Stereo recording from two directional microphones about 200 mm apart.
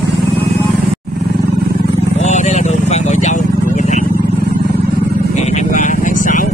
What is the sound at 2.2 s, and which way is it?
Vehicle, 35° left (ahead or behind).